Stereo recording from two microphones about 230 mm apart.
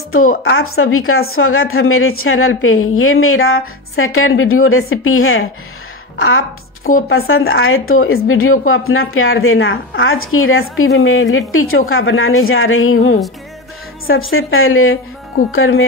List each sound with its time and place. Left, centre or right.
0.4 s a woman's voice: left
6.8 s a woman's voice: left
7.1 s speech: left